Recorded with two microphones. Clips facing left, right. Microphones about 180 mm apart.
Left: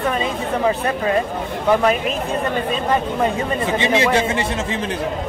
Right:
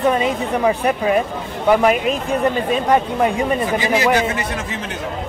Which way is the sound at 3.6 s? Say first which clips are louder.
Left 3 dB; 25° left (ahead or behind).